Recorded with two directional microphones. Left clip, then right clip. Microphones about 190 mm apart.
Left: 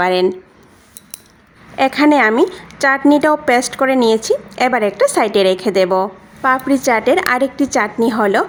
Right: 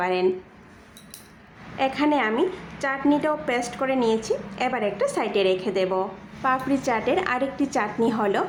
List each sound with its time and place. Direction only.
0.0 s a woman's voice: 45° left (ahead or behind)
1.7 s a woman's voice: 50° left (ahead or behind)